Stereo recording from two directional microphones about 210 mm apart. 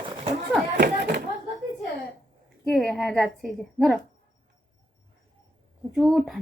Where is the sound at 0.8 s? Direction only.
45° right (ahead or behind).